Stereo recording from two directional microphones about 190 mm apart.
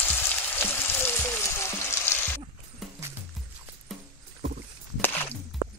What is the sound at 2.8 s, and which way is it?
Music, centre (ahead or behind).